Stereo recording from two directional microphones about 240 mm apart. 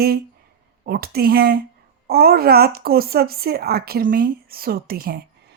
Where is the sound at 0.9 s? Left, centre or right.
Right.